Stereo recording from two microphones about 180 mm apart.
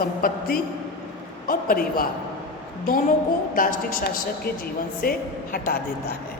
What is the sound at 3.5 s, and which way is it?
A woman's voice, 50° left (ahead or behind).